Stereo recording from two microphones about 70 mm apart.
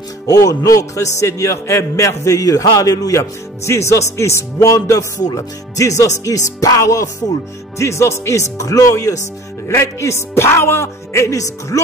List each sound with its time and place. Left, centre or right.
0.3 s a man's voice: left
9.7 s speech: left